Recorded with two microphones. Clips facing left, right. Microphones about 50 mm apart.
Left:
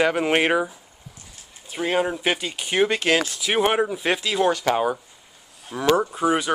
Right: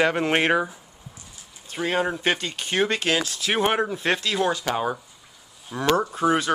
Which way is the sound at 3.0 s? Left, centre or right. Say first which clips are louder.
Left 3 dB; left.